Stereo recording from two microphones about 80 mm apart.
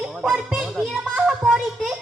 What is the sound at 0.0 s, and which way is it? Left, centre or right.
Speech, centre.